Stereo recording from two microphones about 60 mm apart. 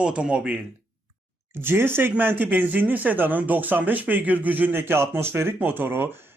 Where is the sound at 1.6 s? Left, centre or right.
Right.